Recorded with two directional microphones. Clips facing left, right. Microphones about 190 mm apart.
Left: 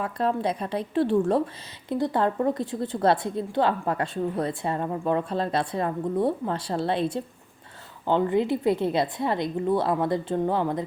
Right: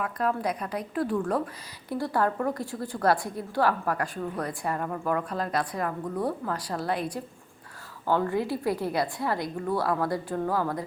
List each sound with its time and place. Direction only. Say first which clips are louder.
0.0 s a woman's voice: left 2 dB; 25° left (ahead or behind)